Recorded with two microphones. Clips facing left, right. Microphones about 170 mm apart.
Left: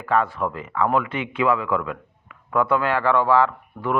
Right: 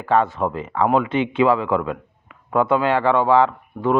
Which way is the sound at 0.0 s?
25° right (ahead or behind).